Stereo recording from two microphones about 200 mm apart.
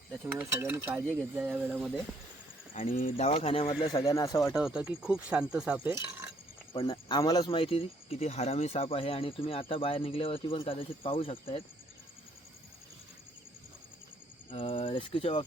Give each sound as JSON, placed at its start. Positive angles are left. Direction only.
{"t": 0.3, "sound": "speech", "side_deg": -10}
{"t": 2.7, "sound": "speech", "side_deg": 40}
{"t": 4.5, "sound": "speech", "side_deg": -5}
{"t": 6.7, "sound": "speech", "side_deg": 25}
{"t": 14.5, "sound": "speech", "side_deg": 25}